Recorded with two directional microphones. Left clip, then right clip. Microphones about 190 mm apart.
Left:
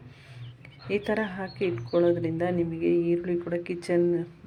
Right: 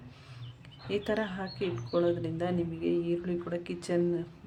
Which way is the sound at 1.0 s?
15° left (ahead or behind).